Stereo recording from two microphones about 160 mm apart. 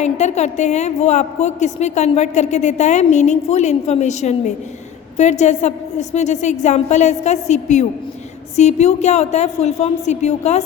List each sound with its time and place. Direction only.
0.0 s a woman's voice: 45° left (ahead or behind)